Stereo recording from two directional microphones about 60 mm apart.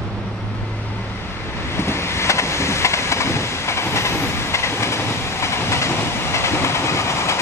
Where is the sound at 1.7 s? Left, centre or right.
Left.